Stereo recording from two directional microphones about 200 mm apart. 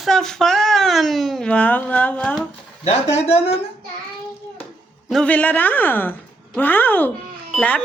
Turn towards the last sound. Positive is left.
turn(degrees=5)  # may be behind; listen again after turning